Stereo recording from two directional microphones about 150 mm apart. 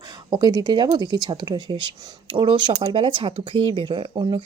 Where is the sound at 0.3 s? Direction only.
25° right (ahead or behind).